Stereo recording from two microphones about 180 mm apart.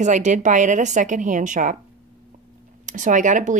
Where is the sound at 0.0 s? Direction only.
40° right (ahead or behind).